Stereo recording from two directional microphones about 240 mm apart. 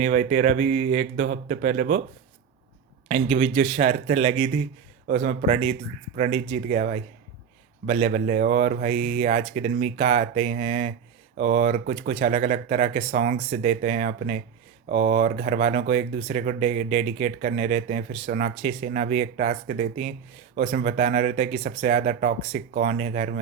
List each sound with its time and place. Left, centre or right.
0.0 s speech: right
3.1 s speech: right